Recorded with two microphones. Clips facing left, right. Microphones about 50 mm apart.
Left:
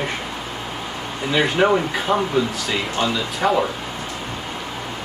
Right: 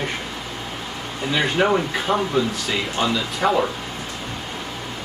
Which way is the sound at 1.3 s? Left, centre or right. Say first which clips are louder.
Left 2 dB; centre.